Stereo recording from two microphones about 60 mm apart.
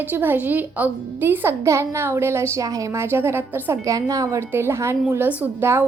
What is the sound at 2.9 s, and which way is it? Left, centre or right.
Speech, right.